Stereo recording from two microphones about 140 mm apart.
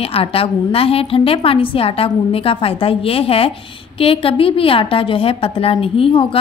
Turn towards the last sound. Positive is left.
turn(degrees=40)  # may be behind; listen again after turning